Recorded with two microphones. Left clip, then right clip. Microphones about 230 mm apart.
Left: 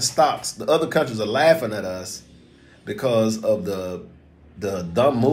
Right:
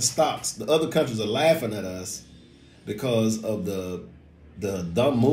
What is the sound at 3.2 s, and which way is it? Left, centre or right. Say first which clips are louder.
A man's voice: left 6 dB; centre.